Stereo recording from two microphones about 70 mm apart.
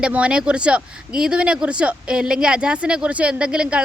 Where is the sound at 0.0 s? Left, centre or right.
Centre.